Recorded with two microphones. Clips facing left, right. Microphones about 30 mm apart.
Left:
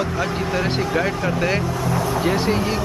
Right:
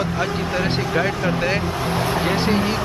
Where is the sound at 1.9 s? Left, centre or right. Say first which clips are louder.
Right 1 dB; right.